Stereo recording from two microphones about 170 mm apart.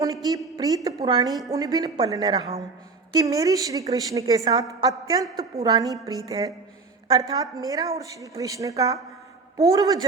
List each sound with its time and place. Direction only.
0.0 s a woman's voice: 20° right (ahead or behind)